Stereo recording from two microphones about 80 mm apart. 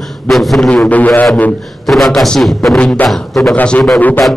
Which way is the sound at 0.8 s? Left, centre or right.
Left.